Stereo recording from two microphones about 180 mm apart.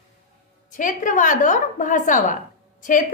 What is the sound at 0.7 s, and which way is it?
A woman's voice, 45° left (ahead or behind).